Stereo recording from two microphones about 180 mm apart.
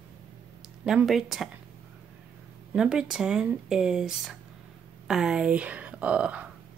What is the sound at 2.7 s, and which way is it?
Speech, 5° right (ahead or behind).